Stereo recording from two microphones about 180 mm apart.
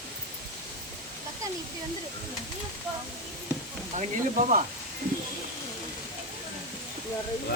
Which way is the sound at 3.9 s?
45° right (ahead or behind).